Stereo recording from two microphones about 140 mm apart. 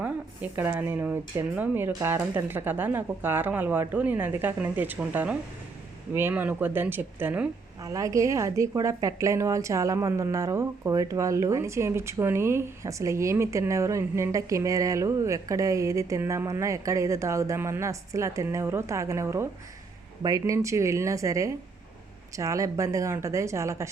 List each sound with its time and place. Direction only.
0.0 s a woman's voice: 10° right (ahead or behind)